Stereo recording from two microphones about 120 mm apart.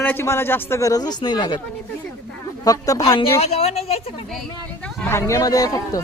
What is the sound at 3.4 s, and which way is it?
Speech, 60° left (ahead or behind).